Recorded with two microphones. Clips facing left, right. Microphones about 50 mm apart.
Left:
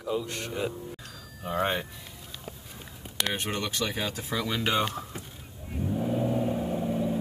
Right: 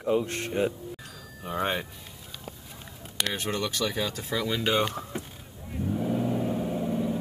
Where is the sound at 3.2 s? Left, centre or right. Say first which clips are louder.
Right 1 dB; centre.